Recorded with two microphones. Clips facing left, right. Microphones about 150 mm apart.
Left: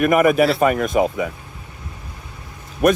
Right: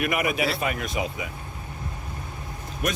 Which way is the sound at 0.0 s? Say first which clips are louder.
Left 10 dB; 45° left (ahead or behind).